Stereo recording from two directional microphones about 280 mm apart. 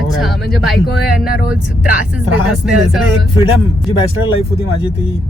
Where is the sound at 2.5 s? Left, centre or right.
Centre.